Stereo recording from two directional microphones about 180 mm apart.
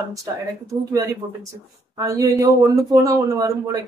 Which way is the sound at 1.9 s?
20° right (ahead or behind).